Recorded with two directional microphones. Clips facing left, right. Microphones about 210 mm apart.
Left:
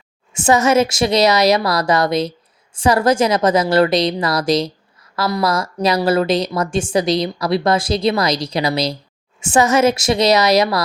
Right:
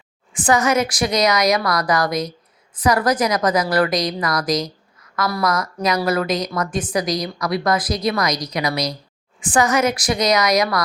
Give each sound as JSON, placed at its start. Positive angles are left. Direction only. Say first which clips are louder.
{"t": 0.3, "sound": "speech", "louder": "left 4 dB", "side_deg": 25}